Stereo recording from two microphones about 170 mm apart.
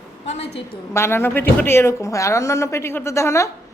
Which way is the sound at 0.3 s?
40° left (ahead or behind).